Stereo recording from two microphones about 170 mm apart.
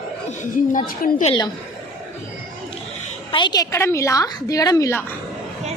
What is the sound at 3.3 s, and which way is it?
A woman's voice, 25° left (ahead or behind).